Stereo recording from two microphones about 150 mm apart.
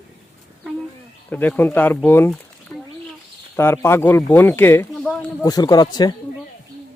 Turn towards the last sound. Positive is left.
turn(degrees=25)  # may be behind; listen again after turning